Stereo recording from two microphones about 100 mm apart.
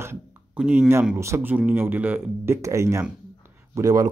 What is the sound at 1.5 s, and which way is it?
Speech, 20° right (ahead or behind).